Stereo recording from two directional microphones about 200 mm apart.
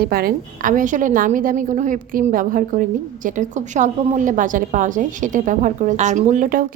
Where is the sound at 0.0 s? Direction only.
50° right (ahead or behind).